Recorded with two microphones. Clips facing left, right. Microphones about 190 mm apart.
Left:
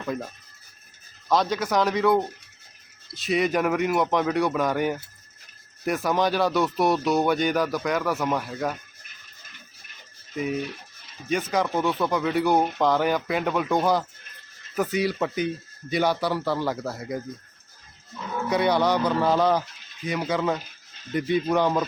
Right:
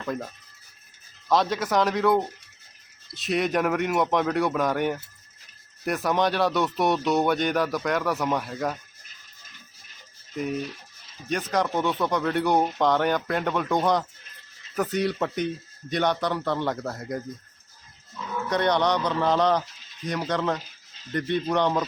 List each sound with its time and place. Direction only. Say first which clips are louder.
0.0 s speech: left 1 dB; 5° left (ahead or behind)
1.3 s speech: even; centre (ahead or behind)
9.5 s music: left 1 dB; 65° left (ahead or behind)
10.3 s speech: left 1 dB; 5° left (ahead or behind)
18.4 s speech: left 1 dB; 5° left (ahead or behind)